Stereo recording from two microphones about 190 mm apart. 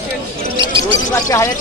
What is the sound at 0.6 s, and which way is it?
Speech, 25° right (ahead or behind).